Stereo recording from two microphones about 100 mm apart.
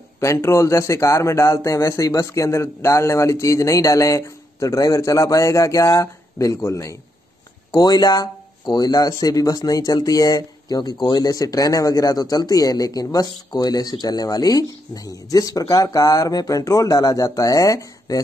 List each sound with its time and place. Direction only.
0.2 s speech: 30° left (ahead or behind)